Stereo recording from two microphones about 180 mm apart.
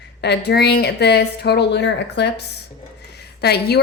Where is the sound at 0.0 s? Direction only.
70° left (ahead or behind).